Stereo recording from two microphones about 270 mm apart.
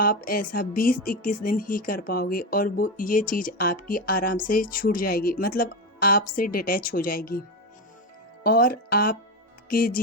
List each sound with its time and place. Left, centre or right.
0.0 s speech: left
8.4 s speech: left